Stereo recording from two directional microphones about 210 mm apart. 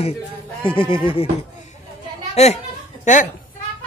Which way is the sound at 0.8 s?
25° left (ahead or behind).